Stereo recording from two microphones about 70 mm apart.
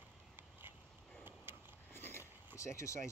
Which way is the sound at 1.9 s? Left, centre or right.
Left.